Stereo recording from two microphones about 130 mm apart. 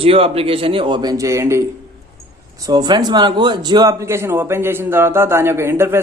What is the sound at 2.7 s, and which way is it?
A man's voice, 30° right (ahead or behind).